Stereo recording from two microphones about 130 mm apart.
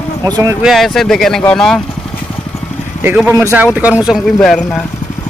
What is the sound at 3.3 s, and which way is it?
Speech, 20° right (ahead or behind).